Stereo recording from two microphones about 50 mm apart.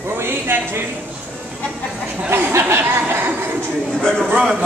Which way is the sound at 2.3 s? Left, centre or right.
Right.